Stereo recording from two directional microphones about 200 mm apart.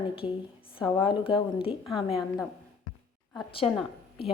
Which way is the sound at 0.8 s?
5° right (ahead or behind).